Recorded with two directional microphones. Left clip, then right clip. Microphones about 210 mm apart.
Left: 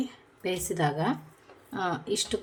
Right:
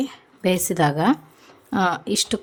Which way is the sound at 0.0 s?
55° right (ahead or behind).